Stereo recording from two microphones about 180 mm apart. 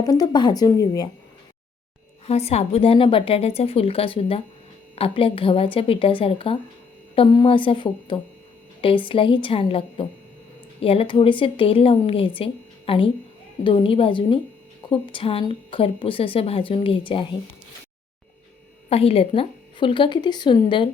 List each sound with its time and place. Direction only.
0.0 s a woman's voice: 20° left (ahead or behind)
2.2 s a woman's voice: 35° left (ahead or behind)
18.9 s a woman's voice: 35° left (ahead or behind)